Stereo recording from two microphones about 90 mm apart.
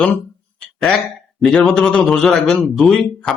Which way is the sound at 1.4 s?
5° left (ahead or behind).